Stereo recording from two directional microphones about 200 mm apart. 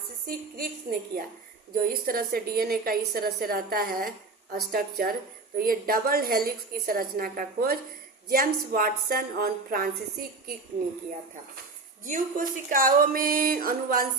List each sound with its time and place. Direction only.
0.3 s a woman's voice: 50° right (ahead or behind)
12.0 s a woman's voice: 40° right (ahead or behind)